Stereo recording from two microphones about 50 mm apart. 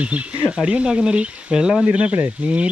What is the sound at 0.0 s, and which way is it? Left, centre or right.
Speech, right.